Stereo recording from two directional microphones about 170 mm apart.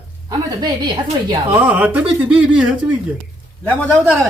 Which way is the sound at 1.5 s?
10° right (ahead or behind).